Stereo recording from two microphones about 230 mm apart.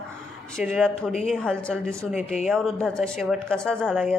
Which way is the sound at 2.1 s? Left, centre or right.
Left.